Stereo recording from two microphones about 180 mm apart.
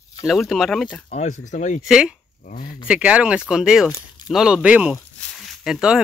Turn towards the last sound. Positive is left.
turn(degrees=-5)  # may be behind; listen again after turning